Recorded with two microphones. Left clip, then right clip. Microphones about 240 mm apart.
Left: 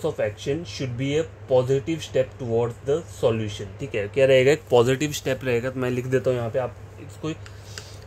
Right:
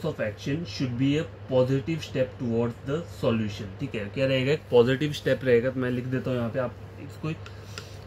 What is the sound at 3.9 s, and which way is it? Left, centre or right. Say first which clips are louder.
Speech: left 9 dB; left.